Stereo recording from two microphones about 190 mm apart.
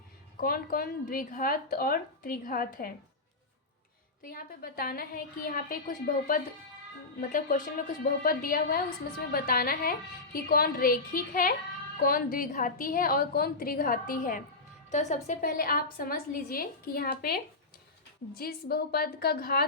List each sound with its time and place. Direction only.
0.3 s a woman's voice: 50° left (ahead or behind)
4.2 s a woman's voice: 50° left (ahead or behind)